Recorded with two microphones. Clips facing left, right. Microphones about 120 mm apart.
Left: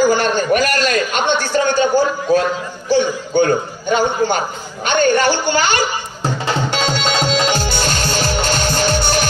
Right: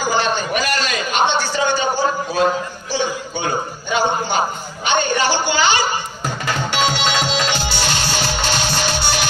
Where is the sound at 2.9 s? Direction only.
55° left (ahead or behind).